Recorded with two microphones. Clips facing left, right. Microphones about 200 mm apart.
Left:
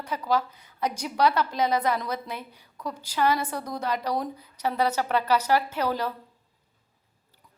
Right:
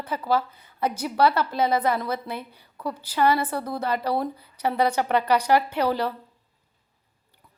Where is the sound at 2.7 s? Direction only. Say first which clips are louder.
Right 4 dB; 10° right (ahead or behind).